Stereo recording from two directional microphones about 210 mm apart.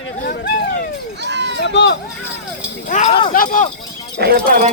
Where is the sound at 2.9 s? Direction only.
35° left (ahead or behind).